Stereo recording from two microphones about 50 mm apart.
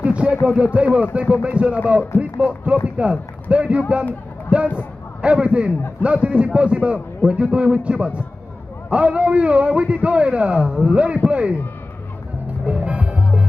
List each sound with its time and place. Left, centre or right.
0.0 s a sound: right
0.4 s a man's voice: centre
12.6 s music: right